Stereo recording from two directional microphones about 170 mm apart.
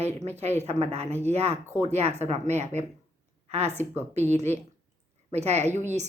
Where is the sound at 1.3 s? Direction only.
40° right (ahead or behind).